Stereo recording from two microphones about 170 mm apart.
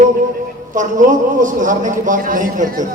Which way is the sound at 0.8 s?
50° right (ahead or behind).